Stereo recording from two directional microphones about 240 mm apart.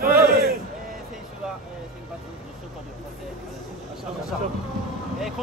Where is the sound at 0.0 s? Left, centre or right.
Right.